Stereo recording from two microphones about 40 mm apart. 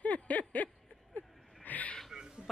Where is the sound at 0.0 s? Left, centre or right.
Left.